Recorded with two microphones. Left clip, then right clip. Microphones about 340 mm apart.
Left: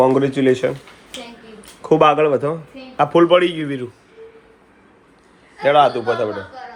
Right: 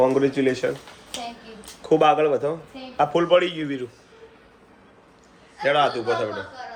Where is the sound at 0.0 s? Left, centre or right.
Centre.